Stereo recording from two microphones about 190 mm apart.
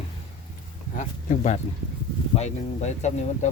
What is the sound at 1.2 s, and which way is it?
Speech, 40° left (ahead or behind).